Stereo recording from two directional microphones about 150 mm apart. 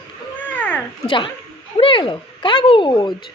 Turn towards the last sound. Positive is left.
turn(degrees=30)  # may be behind; listen again after turning